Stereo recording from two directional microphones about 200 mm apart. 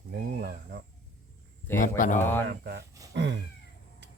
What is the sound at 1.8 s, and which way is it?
Speech, 40° left (ahead or behind).